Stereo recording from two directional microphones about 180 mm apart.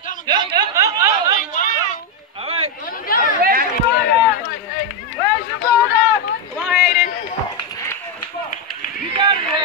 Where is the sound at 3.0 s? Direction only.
50° left (ahead or behind).